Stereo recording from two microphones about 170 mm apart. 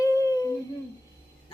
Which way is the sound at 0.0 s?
20° left (ahead or behind).